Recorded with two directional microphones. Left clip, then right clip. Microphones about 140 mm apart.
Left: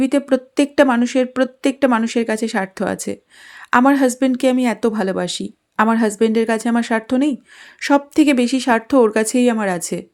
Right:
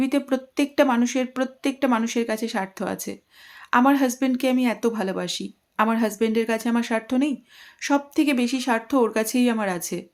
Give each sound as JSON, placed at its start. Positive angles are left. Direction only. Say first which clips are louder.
{"t": 0.0, "sound": "speech", "louder": "left 7 dB", "side_deg": 40}